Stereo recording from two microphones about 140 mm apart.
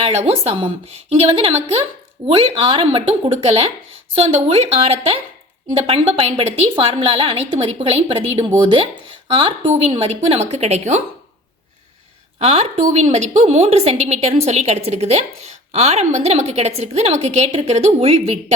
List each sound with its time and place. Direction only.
0.0 s a woman's voice: 50° right (ahead or behind)
12.4 s a woman's voice: 50° right (ahead or behind)